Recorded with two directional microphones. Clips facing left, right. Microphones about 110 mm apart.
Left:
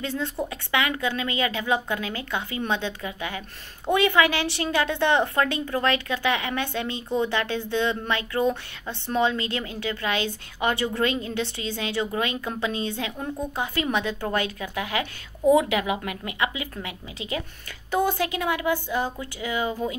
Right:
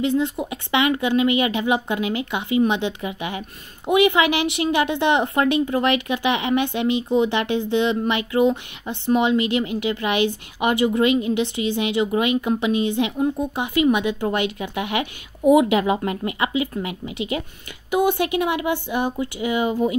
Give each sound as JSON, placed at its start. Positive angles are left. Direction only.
{"t": 0.0, "sound": "a woman's voice", "side_deg": -20}
{"t": 15.8, "sound": "a woman's voice", "side_deg": -30}